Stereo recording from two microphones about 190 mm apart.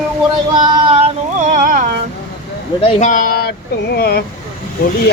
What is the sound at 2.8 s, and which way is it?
Speech, 35° left (ahead or behind).